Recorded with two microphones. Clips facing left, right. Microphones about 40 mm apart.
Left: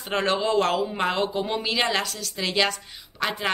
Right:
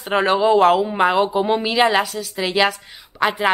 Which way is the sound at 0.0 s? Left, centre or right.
Centre.